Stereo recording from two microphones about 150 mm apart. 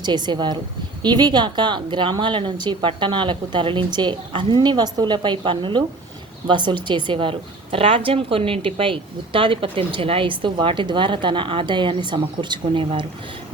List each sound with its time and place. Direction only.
0.0 s a woman's voice: 30° right (ahead or behind)